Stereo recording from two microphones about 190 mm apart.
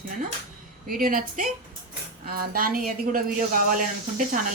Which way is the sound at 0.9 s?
50° right (ahead or behind).